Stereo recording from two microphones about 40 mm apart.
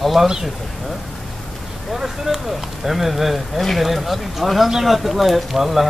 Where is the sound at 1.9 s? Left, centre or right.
Centre.